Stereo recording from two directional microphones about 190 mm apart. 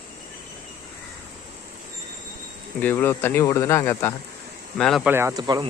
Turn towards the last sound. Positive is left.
turn(degrees=-20)  # may be behind; listen again after turning